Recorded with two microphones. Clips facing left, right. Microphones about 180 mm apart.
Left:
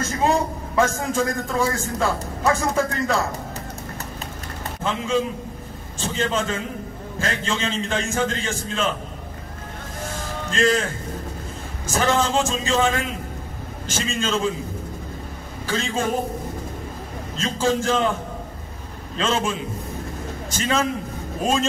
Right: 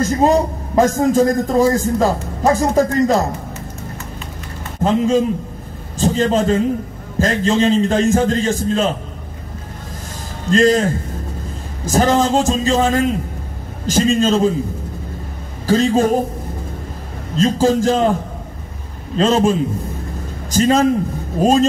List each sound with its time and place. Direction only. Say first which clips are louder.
0.0 s a man's voice: right 7 dB; 40° right (ahead or behind)
4.8 s a man's voice: right 8 dB; 40° right (ahead or behind)
10.5 s a man's voice: right 8 dB; 40° right (ahead or behind)
15.6 s a man's voice: right 11 dB; 40° right (ahead or behind)
17.4 s a man's voice: right 8 dB; 40° right (ahead or behind)
19.1 s a man's voice: right 9 dB; 40° right (ahead or behind)